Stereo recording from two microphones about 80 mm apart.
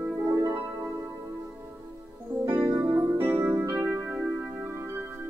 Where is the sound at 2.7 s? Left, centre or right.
Right.